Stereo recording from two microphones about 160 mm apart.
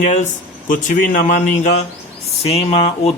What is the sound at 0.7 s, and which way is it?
Speech, 55° left (ahead or behind).